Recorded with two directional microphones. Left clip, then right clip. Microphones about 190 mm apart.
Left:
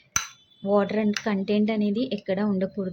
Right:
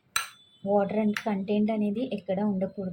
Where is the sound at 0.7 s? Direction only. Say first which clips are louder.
Left 2 dB; 25° left (ahead or behind).